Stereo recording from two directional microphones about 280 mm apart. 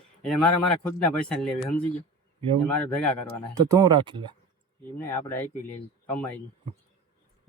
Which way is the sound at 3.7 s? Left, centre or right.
Centre.